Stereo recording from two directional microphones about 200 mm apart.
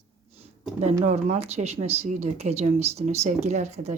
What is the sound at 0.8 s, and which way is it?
Speech, 35° right (ahead or behind).